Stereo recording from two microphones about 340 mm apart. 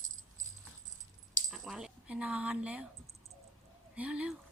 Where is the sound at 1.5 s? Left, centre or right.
Centre.